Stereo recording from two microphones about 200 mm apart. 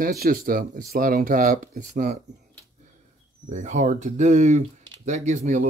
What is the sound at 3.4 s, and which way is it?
Speech, 35° right (ahead or behind).